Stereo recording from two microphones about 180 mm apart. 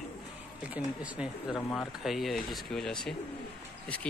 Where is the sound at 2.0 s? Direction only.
Centre (ahead or behind).